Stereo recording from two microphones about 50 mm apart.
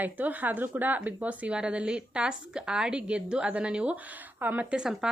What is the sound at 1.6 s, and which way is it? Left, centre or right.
Speech, centre.